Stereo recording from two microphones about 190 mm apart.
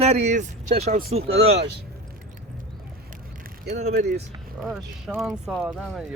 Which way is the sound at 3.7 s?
40° right (ahead or behind).